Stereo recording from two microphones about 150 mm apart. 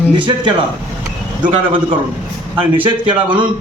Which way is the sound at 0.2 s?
35° right (ahead or behind).